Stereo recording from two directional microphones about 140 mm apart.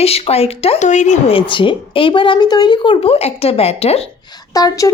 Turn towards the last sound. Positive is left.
turn(degrees=25)  # may be behind; listen again after turning